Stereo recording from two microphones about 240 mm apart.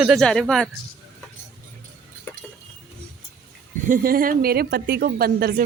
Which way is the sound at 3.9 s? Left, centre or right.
Right.